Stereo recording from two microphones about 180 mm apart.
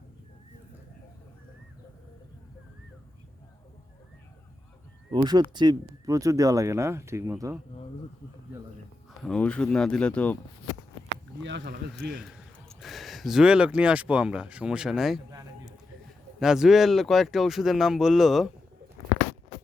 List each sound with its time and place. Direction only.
5.1 s speech: 25° right (ahead or behind)
9.2 s speech: 5° left (ahead or behind)
11.1 s speech: 75° right (ahead or behind)
12.2 s speech: centre (ahead or behind)
15.3 s a sound: 20° right (ahead or behind)
16.4 s speech: 5° right (ahead or behind)